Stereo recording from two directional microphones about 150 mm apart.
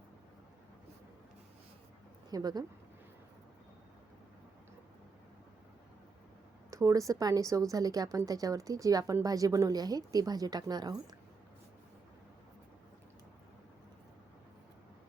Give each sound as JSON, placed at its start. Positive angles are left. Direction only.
{"t": 2.3, "sound": "a woman's voice", "side_deg": -25}
{"t": 6.7, "sound": "a woman's voice", "side_deg": -20}